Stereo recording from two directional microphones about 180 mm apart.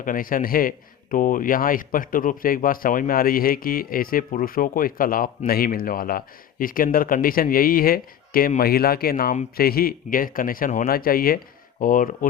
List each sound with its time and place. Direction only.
0.0 s speech: 50° left (ahead or behind)